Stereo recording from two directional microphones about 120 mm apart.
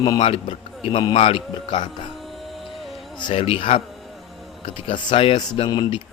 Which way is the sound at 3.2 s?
45° left (ahead or behind).